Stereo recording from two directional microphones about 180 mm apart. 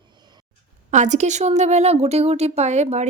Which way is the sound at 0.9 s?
40° right (ahead or behind).